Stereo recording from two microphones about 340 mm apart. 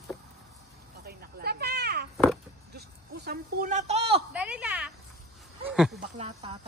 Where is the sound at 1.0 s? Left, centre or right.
Right.